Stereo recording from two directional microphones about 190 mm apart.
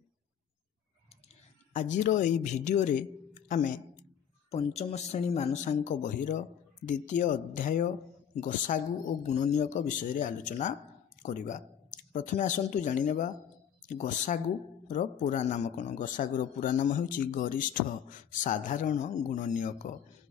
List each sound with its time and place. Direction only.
1.7 s a man's voice: 40° left (ahead or behind)